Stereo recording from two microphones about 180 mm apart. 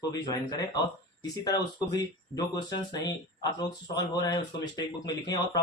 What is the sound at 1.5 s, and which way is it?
A man's voice, 20° left (ahead or behind).